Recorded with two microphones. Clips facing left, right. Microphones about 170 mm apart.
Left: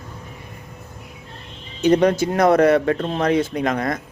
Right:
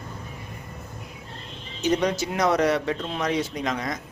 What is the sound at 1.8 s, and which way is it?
A man's voice, 55° left (ahead or behind).